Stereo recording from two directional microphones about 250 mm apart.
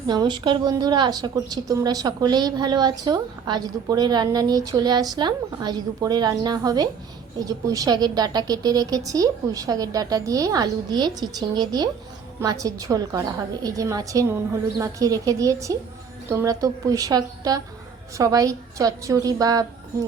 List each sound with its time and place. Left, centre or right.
0.1 s a woman's voice: centre